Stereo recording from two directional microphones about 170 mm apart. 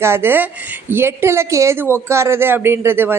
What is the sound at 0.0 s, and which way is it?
A woman's voice, 15° right (ahead or behind).